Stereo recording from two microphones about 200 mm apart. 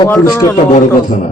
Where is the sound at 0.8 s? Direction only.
40° left (ahead or behind).